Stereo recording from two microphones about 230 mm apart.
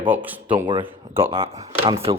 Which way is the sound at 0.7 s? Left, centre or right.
Centre.